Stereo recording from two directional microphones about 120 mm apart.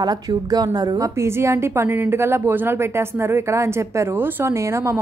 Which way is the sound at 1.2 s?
25° right (ahead or behind).